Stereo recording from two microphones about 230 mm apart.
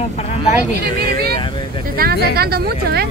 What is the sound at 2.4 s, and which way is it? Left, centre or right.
Speech, right.